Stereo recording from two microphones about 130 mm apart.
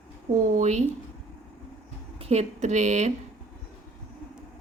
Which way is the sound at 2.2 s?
55° right (ahead or behind).